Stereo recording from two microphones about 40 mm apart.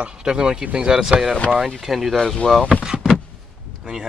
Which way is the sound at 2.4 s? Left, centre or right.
Left.